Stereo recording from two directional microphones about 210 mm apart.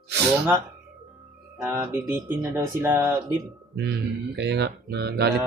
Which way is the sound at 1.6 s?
10° right (ahead or behind).